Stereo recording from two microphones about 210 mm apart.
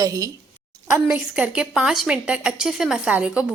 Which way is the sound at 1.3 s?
5° right (ahead or behind).